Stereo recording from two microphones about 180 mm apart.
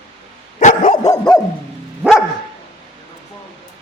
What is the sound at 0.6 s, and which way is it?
Dog, 45° left (ahead or behind).